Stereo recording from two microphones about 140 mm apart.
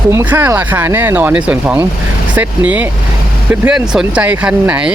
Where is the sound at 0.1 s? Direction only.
15° right (ahead or behind).